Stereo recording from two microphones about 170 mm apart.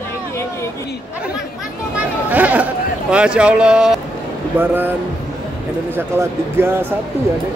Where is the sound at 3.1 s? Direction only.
5° right (ahead or behind).